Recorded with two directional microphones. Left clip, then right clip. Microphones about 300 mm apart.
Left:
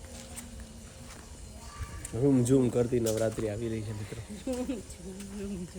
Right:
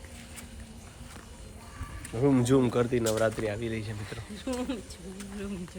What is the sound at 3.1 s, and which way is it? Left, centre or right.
Speech, centre.